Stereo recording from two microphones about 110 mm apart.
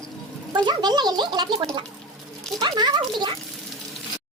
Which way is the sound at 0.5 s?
40° right (ahead or behind).